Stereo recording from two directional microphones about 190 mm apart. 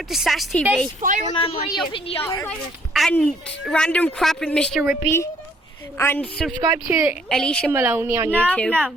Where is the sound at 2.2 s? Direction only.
10° left (ahead or behind).